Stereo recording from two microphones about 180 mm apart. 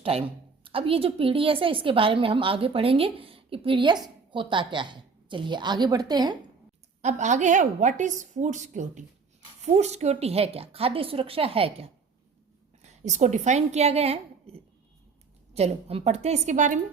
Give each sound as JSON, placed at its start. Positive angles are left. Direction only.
{"t": 0.0, "sound": "a woman's voice", "side_deg": -30}
{"t": 7.0, "sound": "a woman's voice", "side_deg": -40}